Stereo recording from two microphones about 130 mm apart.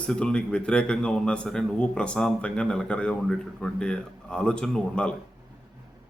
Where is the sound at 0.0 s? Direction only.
5° left (ahead or behind).